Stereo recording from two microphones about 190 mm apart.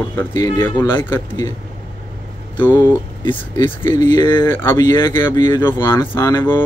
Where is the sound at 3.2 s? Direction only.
25° left (ahead or behind).